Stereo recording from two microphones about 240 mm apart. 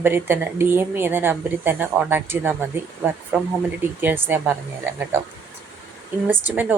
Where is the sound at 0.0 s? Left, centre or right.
Centre.